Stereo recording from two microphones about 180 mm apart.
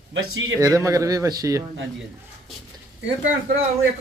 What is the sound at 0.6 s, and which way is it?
A man's voice, 20° right (ahead or behind).